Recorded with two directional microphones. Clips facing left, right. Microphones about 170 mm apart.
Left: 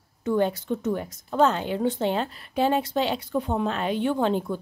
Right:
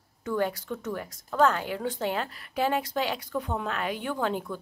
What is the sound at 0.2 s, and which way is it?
A woman's voice, 25° left (ahead or behind).